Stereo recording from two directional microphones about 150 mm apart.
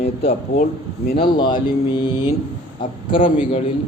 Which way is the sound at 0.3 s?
90° left.